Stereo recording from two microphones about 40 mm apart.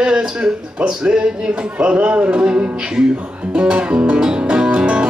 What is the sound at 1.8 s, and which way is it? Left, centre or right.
Music, right.